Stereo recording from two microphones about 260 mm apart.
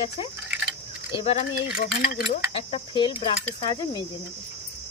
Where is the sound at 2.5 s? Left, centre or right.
Left.